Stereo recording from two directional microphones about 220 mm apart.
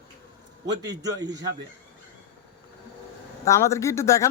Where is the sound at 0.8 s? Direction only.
15° right (ahead or behind).